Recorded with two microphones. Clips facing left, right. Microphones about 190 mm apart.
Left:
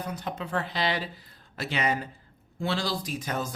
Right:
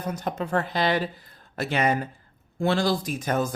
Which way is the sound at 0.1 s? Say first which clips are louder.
Right 7 dB; 45° right (ahead or behind).